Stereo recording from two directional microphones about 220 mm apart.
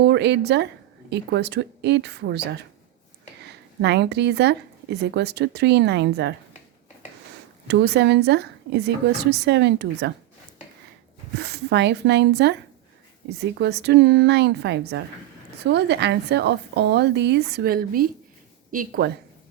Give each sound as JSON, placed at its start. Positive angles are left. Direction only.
{"t": 0.0, "sound": "a woman's voice", "side_deg": -50}
{"t": 7.7, "sound": "a woman's voice", "side_deg": -50}
{"t": 11.3, "sound": "a woman's voice", "side_deg": -50}
{"t": 13.6, "sound": "a woman's voice", "side_deg": -50}